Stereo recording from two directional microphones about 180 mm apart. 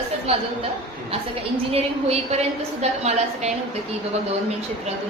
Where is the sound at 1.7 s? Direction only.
35° right (ahead or behind).